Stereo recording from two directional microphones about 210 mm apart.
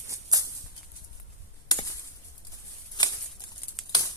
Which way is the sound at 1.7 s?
20° left (ahead or behind).